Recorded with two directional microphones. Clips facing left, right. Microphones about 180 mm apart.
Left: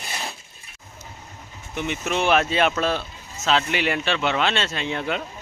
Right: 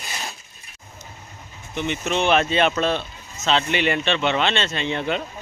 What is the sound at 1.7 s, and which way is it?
Speech, 5° left (ahead or behind).